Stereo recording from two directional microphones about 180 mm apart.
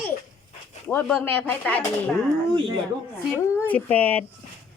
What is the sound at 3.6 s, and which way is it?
Speech, 10° left (ahead or behind).